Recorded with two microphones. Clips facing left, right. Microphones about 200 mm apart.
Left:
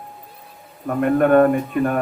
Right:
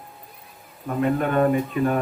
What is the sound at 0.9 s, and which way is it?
A man's voice, 55° left (ahead or behind).